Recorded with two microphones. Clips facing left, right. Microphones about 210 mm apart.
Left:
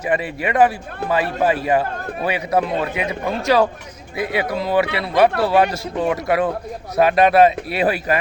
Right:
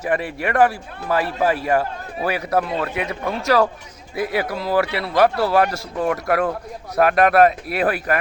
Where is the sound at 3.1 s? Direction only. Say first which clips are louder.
Left 2 dB; centre (ahead or behind).